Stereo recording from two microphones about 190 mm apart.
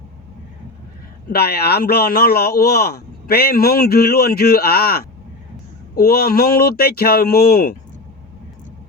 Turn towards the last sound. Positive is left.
turn(degrees=50)  # may be behind; listen again after turning